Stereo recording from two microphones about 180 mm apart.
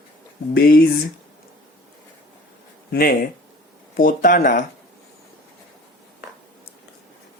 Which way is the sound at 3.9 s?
50° left (ahead or behind).